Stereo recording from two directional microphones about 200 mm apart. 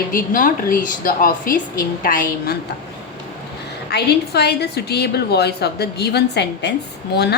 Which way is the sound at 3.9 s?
55° left (ahead or behind).